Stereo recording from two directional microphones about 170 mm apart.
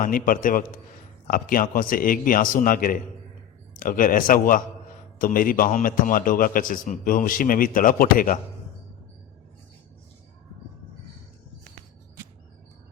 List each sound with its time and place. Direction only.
0.0 s a man's voice: 55° left (ahead or behind)